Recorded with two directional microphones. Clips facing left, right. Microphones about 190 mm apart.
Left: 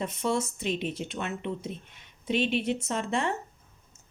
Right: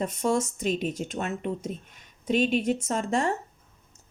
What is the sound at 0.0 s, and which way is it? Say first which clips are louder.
Speech: right 3 dB; 45° right (ahead or behind).